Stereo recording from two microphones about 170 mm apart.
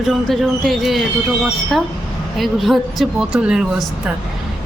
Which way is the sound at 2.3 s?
Centre (ahead or behind).